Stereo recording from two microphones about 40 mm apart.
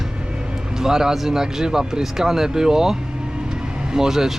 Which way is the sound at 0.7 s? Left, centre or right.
Centre.